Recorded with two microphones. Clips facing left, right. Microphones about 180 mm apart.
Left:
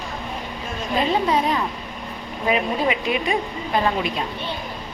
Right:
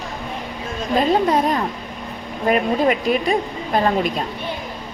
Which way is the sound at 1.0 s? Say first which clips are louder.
Right 3 dB; 45° right (ahead or behind).